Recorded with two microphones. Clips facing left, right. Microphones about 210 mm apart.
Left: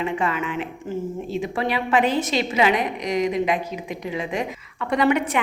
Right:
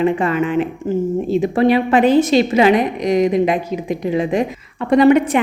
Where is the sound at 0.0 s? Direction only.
45° right (ahead or behind).